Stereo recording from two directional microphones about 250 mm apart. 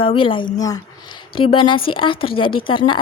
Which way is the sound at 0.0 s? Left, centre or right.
Left.